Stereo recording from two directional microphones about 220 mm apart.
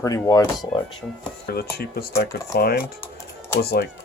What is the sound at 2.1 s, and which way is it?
Speech, 15° left (ahead or behind).